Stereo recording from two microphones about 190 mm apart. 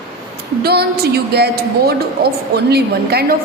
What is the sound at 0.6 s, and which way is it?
A woman's voice, 55° right (ahead or behind).